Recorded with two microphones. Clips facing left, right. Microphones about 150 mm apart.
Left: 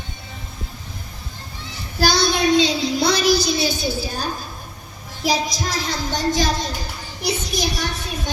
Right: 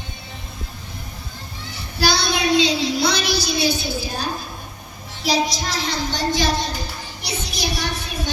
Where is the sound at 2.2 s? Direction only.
45° left (ahead or behind).